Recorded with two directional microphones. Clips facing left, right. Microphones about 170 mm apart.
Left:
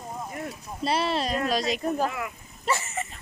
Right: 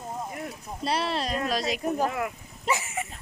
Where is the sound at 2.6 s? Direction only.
15° right (ahead or behind).